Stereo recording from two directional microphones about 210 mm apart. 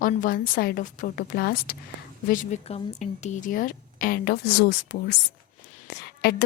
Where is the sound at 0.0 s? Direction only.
40° left (ahead or behind).